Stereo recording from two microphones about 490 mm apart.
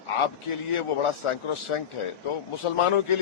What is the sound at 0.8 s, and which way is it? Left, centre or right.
A man's voice, left.